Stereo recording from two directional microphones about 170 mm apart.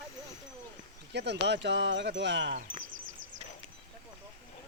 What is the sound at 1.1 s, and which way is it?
Speech, 90° right.